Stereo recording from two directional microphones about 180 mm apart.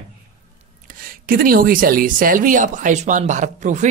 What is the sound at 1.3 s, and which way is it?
Speech, 50° right (ahead or behind).